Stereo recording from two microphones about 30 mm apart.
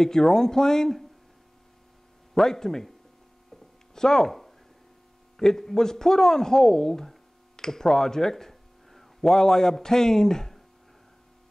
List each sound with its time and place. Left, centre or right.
0.0 s speech: centre
2.3 s speech: centre
3.9 s speech: centre
5.4 s speech: centre